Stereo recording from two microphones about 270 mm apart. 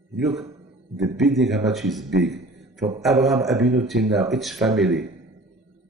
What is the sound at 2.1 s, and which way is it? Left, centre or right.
Speech, right.